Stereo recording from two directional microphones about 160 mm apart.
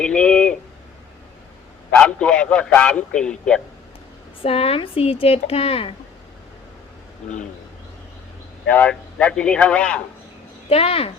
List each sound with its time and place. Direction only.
0.0 s a sound: 5° left (ahead or behind)
2.0 s a man's voice: 5° left (ahead or behind)
4.4 s speech: 40° left (ahead or behind)
8.7 s a man's voice: 5° left (ahead or behind)
10.7 s speech: 40° left (ahead or behind)